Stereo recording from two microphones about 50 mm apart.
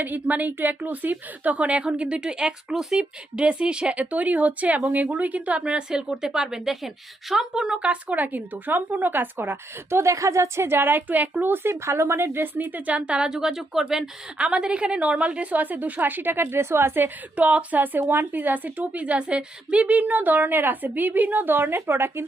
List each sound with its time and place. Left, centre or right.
0.0 s a woman's voice: right; by 7.8 s centre
7.8 s a woman's voice: right
10.0 s a woman's voice: right; by 13.8 s centre
14.3 s a woman's voice: right
17.3 s a woman's voice: right